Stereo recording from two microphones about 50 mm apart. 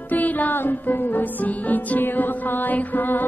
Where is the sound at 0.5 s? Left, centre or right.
Left.